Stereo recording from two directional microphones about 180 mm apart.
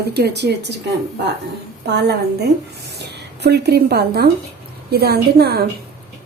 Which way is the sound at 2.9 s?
70° right (ahead or behind).